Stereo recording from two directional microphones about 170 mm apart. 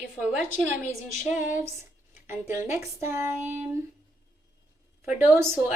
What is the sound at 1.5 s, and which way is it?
Speech, 15° right (ahead or behind).